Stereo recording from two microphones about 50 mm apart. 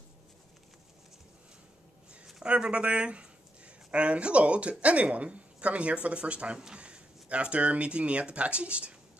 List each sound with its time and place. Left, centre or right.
2.4 s speech: right